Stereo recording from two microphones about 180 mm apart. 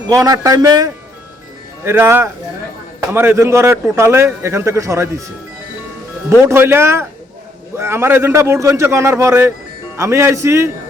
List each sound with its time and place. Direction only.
0.1 s a man's voice: 20° right (ahead or behind)
6.4 s a man's voice: 15° right (ahead or behind)